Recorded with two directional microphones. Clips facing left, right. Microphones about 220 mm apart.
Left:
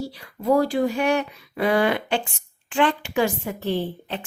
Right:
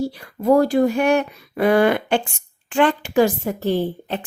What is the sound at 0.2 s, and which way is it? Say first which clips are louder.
A woman's voice: right 4 dB; 50° right (ahead or behind).